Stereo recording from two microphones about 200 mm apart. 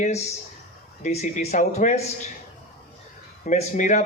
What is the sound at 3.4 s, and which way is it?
Speech, 40° left (ahead or behind).